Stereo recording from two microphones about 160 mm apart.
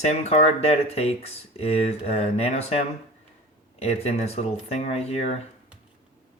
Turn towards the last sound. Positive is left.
turn(degrees=45)  # may be behind; listen again after turning